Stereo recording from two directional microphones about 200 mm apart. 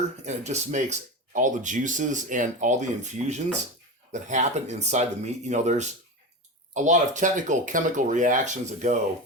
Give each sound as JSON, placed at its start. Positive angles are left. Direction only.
{"t": 0.3, "sound": "speech", "side_deg": -35}